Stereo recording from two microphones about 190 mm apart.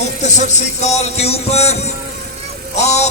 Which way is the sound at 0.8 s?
35° left (ahead or behind).